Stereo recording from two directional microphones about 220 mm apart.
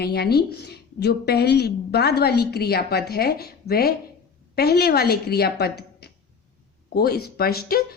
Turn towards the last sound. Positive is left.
turn(degrees=45)  # may be behind; listen again after turning